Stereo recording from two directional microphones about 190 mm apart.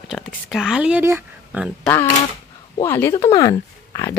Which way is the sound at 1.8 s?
10° left (ahead or behind).